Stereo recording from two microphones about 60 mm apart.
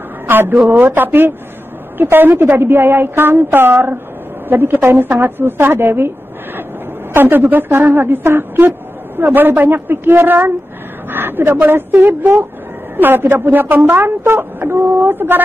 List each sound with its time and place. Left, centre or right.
0.3 s a woman's voice: right